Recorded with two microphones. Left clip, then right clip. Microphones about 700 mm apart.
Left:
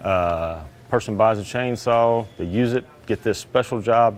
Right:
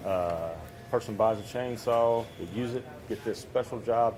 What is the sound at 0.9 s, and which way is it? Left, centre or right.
Speech, left.